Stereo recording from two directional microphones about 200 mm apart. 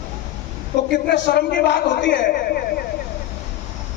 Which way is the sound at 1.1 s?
55° left (ahead or behind).